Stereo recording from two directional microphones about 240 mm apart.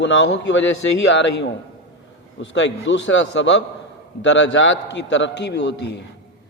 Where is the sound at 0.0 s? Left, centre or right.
Left.